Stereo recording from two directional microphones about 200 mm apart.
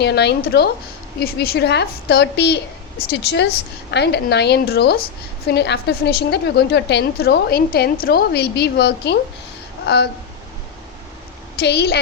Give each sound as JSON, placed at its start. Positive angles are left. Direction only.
{"t": 0.0, "sound": "a woman's voice", "side_deg": 55}
{"t": 11.6, "sound": "a woman's voice", "side_deg": 55}